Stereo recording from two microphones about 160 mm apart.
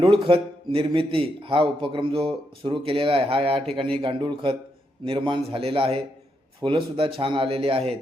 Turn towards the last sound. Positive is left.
turn(degrees=-35)  # may be behind; listen again after turning